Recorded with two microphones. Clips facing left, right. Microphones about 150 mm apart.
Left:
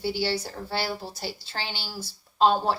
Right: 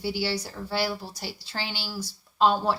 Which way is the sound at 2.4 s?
20° left (ahead or behind).